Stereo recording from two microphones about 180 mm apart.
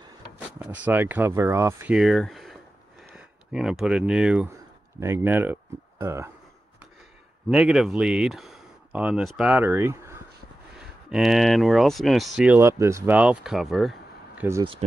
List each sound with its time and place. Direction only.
0.6 s speech: 10° right (ahead or behind)
7.4 s speech: 5° right (ahead or behind)
11.1 s speech: centre (ahead or behind)
14.6 s speech: 30° right (ahead or behind)